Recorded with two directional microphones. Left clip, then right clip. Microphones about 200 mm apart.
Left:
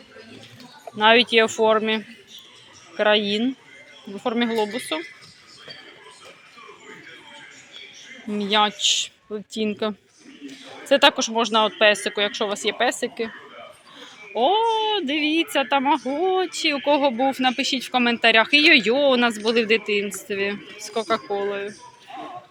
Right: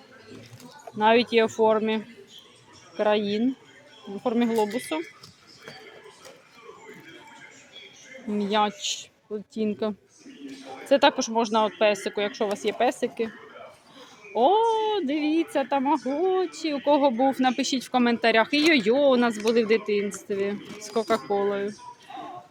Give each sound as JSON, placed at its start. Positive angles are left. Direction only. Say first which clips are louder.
{"t": 0.9, "sound": "a man's voice", "louder": "left 4 dB", "side_deg": -5}
{"t": 8.3, "sound": "a man's voice", "louder": "left 4 dB", "side_deg": -5}